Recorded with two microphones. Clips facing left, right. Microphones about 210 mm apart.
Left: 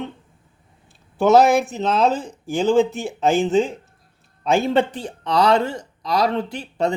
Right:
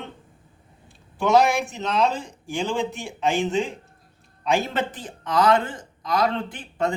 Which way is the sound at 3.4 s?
35° left (ahead or behind).